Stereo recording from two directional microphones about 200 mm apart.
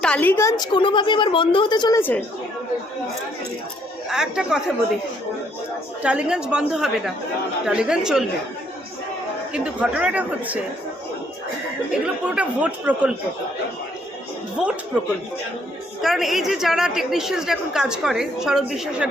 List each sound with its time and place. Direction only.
0.0 s a woman's voice: 5° left (ahead or behind)
2.0 s a woman's voice: 10° left (ahead or behind)
4.1 s a woman's voice: 5° right (ahead or behind)
6.0 s a woman's voice: 5° right (ahead or behind)
9.5 s speech: 5° right (ahead or behind)
12.0 s speech: 5° right (ahead or behind)
16.0 s a woman's voice: centre (ahead or behind)